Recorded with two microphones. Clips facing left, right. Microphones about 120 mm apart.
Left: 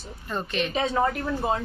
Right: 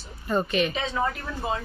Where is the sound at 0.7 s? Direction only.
40° left (ahead or behind).